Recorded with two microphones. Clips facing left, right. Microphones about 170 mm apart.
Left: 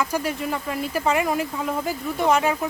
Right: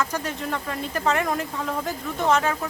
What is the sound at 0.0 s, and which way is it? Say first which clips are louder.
Speech: left 3 dB; 10° left (ahead or behind).